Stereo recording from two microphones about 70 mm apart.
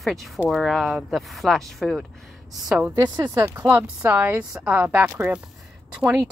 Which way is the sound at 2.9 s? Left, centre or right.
Right.